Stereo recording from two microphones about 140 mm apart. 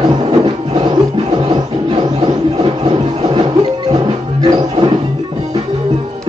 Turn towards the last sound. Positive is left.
turn(degrees=-40)  # may be behind; listen again after turning